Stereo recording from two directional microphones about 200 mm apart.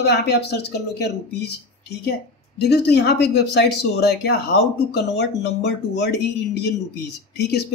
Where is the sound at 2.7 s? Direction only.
55° left (ahead or behind).